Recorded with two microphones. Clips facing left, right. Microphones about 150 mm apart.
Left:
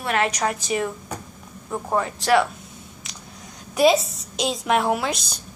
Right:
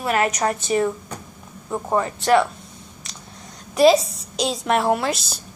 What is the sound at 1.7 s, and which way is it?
Speech, centre (ahead or behind).